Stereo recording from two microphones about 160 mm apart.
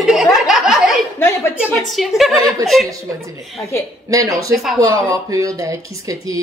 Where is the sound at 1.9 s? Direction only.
Centre (ahead or behind).